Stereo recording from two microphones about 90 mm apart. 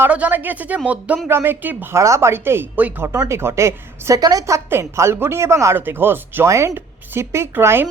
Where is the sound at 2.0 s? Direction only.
35° right (ahead or behind).